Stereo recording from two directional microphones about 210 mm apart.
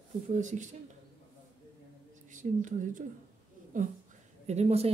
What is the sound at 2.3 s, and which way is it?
Speech, 35° right (ahead or behind).